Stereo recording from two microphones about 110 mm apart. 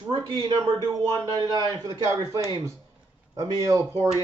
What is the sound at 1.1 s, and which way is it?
Speech, 35° right (ahead or behind).